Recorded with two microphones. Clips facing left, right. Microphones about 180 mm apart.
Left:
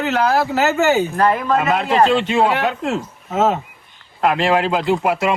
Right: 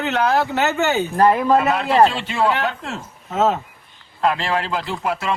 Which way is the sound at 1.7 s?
20° left (ahead or behind).